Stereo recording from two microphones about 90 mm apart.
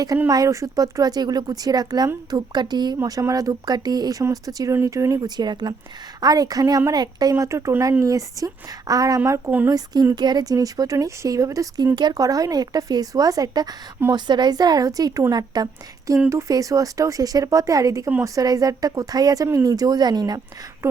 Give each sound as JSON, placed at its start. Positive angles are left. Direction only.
{"t": 0.3, "sound": "a woman's voice", "side_deg": -40}
{"t": 3.0, "sound": "a woman's voice", "side_deg": -35}
{"t": 5.4, "sound": "a woman's voice", "side_deg": -55}
{"t": 9.6, "sound": "speech", "side_deg": -45}
{"t": 11.9, "sound": "a woman's voice", "side_deg": -50}